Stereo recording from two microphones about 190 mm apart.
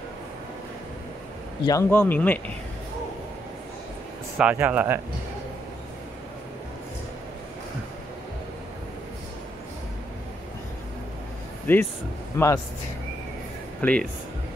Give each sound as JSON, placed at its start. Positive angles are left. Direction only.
{"t": 1.7, "sound": "speech", "side_deg": 15}
{"t": 4.4, "sound": "speech", "side_deg": -5}
{"t": 11.6, "sound": "speech", "side_deg": 10}
{"t": 13.7, "sound": "speech", "side_deg": 5}